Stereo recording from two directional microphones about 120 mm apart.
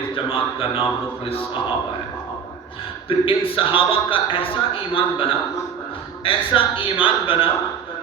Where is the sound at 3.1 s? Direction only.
50° left (ahead or behind).